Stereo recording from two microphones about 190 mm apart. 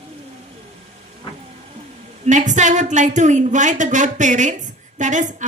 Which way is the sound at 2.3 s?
40° right (ahead or behind).